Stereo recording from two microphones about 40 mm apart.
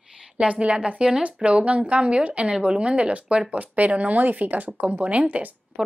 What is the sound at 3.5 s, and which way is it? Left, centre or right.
Speech, right.